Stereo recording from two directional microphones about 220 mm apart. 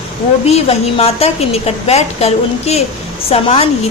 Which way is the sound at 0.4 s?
30° left (ahead or behind).